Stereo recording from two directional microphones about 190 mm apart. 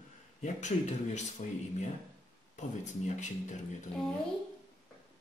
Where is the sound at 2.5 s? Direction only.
40° left (ahead or behind).